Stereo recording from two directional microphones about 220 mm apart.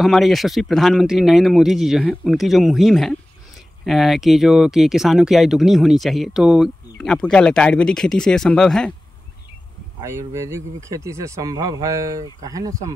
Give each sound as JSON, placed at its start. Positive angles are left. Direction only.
{"t": 0.0, "sound": "speech", "side_deg": 0}
{"t": 10.0, "sound": "speech", "side_deg": -10}